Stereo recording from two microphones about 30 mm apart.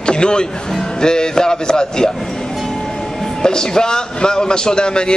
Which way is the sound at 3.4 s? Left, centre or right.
Left.